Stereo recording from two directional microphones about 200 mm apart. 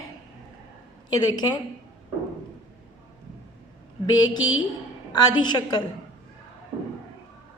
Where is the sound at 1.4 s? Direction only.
20° left (ahead or behind).